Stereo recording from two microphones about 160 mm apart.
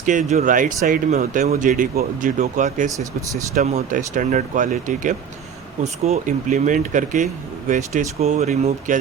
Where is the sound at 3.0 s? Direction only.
20° right (ahead or behind).